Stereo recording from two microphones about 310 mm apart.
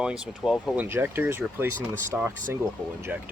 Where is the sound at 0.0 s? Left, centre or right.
Centre.